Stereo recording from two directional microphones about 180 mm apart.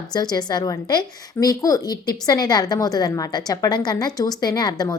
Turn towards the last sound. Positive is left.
turn(degrees=20)  # may be behind; listen again after turning